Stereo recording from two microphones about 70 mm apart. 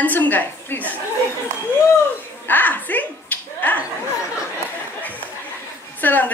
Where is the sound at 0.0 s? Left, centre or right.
Left.